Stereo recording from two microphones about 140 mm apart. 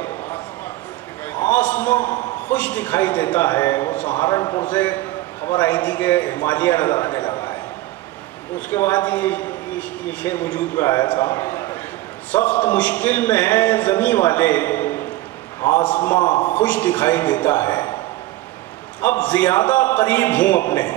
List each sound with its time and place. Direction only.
1.3 s a sound: 10° left (ahead or behind)
2.5 s speech: 10° left (ahead or behind)
4.2 s a man's voice: 25° left (ahead or behind)
4.7 s speech: 10° left (ahead or behind)
7.1 s a sound: 30° left (ahead or behind)
8.5 s a man's voice: 15° left (ahead or behind)
10.8 s a man's voice: 20° left (ahead or behind)
11.2 s a sound: 20° left (ahead or behind)
12.3 s speech: 10° left (ahead or behind)
17.6 s a man's voice: 30° left (ahead or behind)
18.9 s speech: 10° left (ahead or behind)